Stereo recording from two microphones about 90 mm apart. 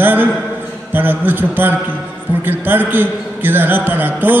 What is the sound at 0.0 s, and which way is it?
A man's voice, 20° right (ahead or behind).